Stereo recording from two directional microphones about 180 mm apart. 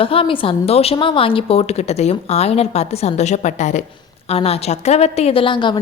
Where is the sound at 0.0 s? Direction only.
30° left (ahead or behind).